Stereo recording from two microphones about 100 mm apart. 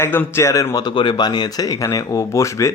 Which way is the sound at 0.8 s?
50° left (ahead or behind).